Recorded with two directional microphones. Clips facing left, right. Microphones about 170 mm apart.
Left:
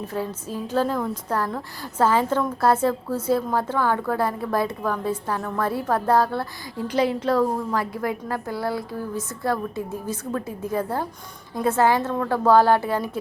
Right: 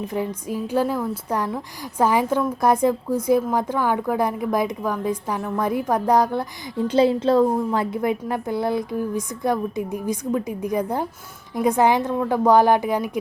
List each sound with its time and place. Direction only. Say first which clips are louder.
0.1 s a woman's voice: right 3 dB; 15° right (ahead or behind)